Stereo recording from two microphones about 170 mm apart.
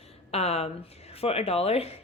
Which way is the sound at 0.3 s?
35° left (ahead or behind).